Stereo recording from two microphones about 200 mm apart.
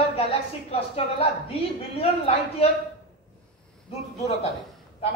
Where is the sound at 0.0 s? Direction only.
30° left (ahead or behind).